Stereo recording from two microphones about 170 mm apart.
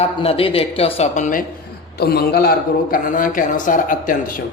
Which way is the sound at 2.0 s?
65° left (ahead or behind).